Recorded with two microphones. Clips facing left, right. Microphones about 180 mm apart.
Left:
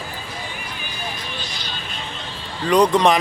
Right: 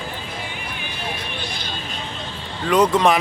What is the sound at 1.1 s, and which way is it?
Music, 60° right (ahead or behind).